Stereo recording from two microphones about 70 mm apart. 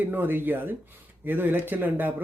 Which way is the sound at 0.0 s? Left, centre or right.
Right.